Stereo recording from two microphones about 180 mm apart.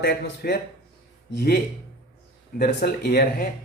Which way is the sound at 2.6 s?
60° left (ahead or behind).